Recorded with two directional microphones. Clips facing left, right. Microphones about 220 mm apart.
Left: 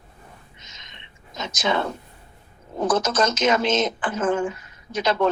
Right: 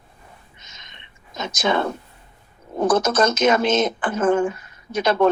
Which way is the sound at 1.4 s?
55° right (ahead or behind).